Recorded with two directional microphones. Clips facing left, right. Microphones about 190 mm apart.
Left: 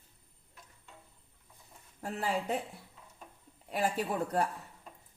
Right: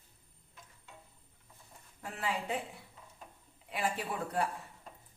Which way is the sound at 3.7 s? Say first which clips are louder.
Left 4 dB; 40° left (ahead or behind).